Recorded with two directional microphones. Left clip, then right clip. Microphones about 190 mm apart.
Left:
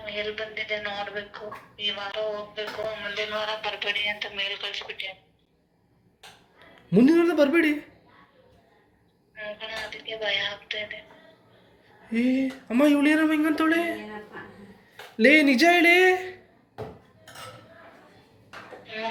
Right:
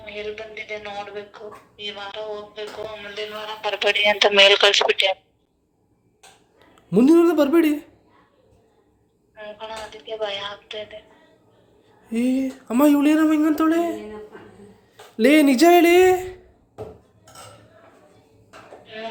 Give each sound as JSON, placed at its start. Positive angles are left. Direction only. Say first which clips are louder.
{"t": 0.0, "sound": "a woman's voice", "louder": "even", "side_deg": -35}
{"t": 3.6, "sound": "speech", "louder": "right 8 dB", "side_deg": -70}
{"t": 6.9, "sound": "speech", "louder": "right 4 dB", "side_deg": -20}
{"t": 9.4, "sound": "a sound", "louder": "right 1 dB", "side_deg": -35}
{"t": 12.0, "sound": "speech", "louder": "right 2 dB", "side_deg": -25}
{"t": 15.2, "sound": "speech", "louder": "right 3 dB", "side_deg": -30}
{"t": 18.9, "sound": "a sound", "louder": "left 1 dB", "side_deg": -30}